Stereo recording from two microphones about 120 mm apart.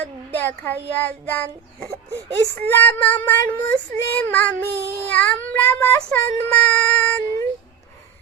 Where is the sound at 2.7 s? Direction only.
15° left (ahead or behind).